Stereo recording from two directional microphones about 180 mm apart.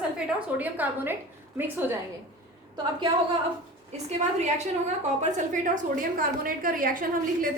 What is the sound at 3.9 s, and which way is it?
A woman's voice, 40° right (ahead or behind).